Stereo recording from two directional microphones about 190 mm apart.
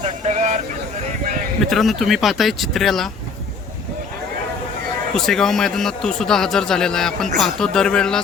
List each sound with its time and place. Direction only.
0.0 s speech: 35° right (ahead or behind)
1.7 s speech: centre (ahead or behind)
5.1 s speech: centre (ahead or behind)